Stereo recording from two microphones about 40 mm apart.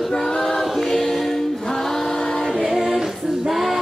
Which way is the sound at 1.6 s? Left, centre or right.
Centre.